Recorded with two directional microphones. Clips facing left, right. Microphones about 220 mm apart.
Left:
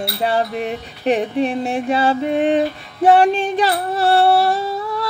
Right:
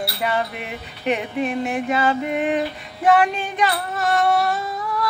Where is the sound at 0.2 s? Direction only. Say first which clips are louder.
Left 6 dB; 35° left (ahead or behind).